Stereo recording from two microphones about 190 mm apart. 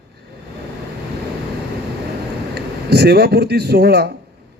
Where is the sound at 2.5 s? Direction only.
55° right (ahead or behind).